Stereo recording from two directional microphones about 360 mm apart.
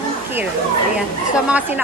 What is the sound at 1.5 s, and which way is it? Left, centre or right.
Speech, centre.